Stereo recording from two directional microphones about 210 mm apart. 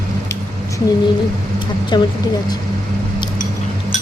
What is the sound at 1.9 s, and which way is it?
Speech, 20° left (ahead or behind).